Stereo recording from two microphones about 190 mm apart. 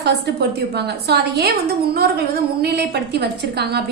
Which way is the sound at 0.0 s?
60° right (ahead or behind).